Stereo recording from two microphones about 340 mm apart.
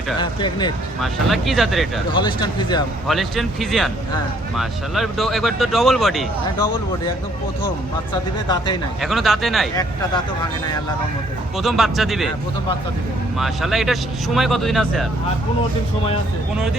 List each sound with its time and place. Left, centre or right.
0.2 s speech: centre
1.0 s speech: centre
2.1 s speech: centre
3.1 s speech: centre
9.0 s speech: centre
11.5 s speech: centre
13.4 s speech: centre